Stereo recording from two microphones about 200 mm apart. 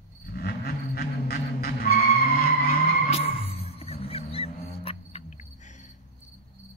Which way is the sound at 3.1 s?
30° left (ahead or behind).